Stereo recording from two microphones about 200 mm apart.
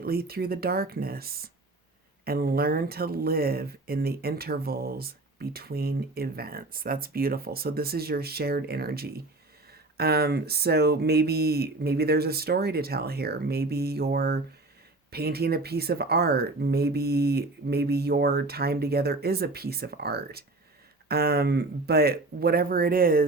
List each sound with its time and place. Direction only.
0.0 s speech: 50° right (ahead or behind)